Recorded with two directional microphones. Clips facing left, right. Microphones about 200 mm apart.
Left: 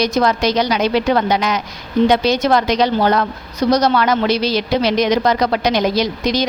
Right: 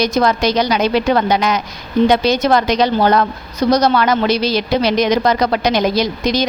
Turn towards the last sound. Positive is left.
turn(degrees=-45)  # may be behind; listen again after turning